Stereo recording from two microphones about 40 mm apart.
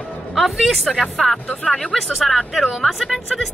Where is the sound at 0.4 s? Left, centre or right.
Centre.